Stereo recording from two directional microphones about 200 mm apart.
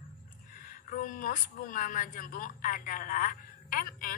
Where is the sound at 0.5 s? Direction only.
45° left (ahead or behind).